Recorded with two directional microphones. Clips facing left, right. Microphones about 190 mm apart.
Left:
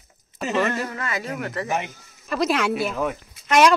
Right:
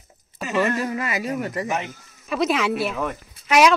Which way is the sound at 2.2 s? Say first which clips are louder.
Even; centre (ahead or behind).